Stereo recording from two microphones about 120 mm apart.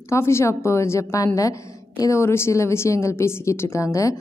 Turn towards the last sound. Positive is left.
turn(degrees=25)  # may be behind; listen again after turning